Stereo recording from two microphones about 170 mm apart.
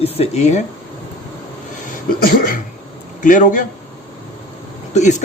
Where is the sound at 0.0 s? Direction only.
35° left (ahead or behind).